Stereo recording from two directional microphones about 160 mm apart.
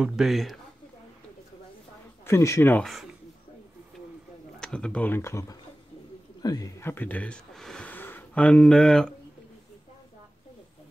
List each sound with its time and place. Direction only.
0.0 s speech: centre (ahead or behind)
2.2 s speech: 15° left (ahead or behind)
2.8 s speech: centre (ahead or behind)
4.6 s speech: 5° left (ahead or behind)